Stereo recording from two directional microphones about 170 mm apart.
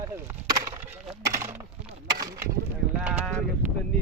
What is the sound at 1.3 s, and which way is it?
Speech, 15° right (ahead or behind).